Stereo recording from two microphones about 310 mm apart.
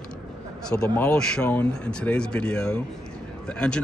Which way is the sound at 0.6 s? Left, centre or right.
Centre.